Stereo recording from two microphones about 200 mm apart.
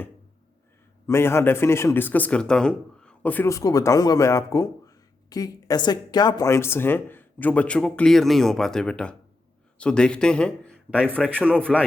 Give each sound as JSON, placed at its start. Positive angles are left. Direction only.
{"t": 1.0, "sound": "a man's voice", "side_deg": 15}